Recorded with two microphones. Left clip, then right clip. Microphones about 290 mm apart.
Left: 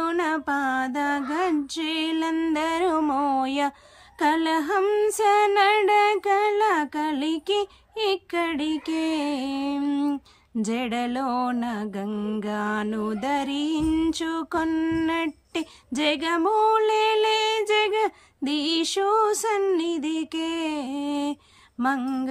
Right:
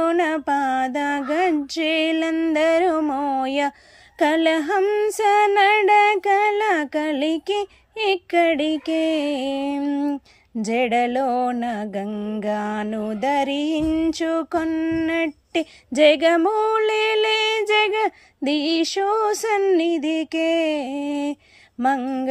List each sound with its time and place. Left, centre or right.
0.0 s mantra: centre
3.0 s a sound: left
3.4 s mantra: centre